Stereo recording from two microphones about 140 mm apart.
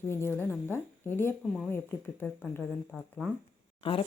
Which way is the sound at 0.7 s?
15° left (ahead or behind).